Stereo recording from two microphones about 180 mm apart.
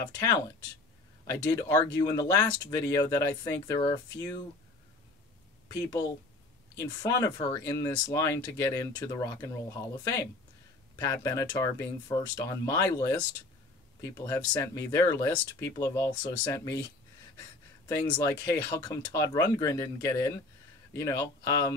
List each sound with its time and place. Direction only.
1.3 s speech: 15° left (ahead or behind)
5.7 s speech: 20° left (ahead or behind)
17.8 s speech: 15° left (ahead or behind)